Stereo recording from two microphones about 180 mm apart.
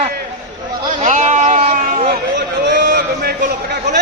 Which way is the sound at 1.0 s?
40° right (ahead or behind).